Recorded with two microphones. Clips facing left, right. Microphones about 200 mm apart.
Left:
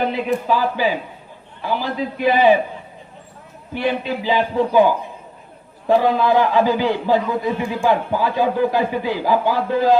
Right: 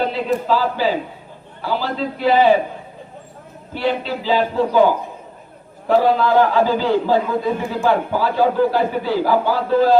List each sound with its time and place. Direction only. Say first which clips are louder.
0.0 s a man's voice: even; 15° left (ahead or behind)
3.8 s a man's voice: even; 15° left (ahead or behind)
5.9 s a man's voice: right 1 dB; 15° left (ahead or behind)